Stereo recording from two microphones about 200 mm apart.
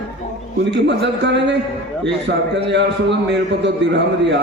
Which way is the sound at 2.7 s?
60° right (ahead or behind).